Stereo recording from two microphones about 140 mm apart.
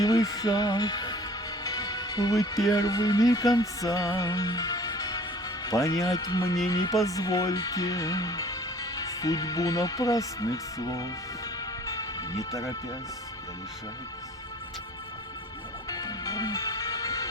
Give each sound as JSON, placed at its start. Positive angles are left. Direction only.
{"t": 0.0, "sound": "speech", "side_deg": 25}
{"t": 11.9, "sound": "music", "side_deg": 25}
{"t": 15.9, "sound": "music", "side_deg": 25}